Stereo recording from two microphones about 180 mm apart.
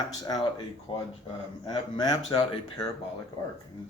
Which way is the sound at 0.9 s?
30° left (ahead or behind).